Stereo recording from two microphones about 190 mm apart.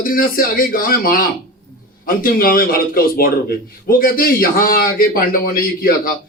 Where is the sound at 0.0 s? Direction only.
50° left (ahead or behind).